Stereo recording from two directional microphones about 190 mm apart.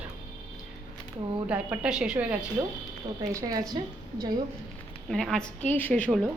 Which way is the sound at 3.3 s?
20° right (ahead or behind).